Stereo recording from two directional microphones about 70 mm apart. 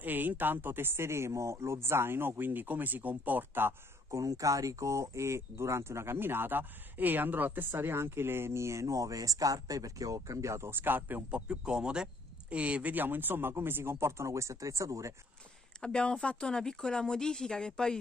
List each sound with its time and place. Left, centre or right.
0.0 s speech: right
4.1 s speech: right
11.2 s speech: centre; by 15.1 s right
15.8 s speech: centre